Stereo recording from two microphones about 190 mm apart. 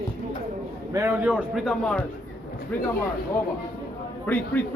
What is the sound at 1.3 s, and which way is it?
Speech, 5° right (ahead or behind).